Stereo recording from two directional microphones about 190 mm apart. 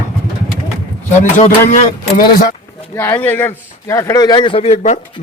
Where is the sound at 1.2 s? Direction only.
40° left (ahead or behind).